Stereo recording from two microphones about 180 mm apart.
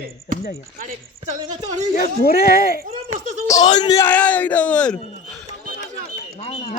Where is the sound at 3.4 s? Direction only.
20° left (ahead or behind).